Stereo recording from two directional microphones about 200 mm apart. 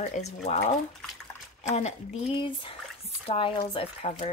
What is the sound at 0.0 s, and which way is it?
Speech, 35° left (ahead or behind).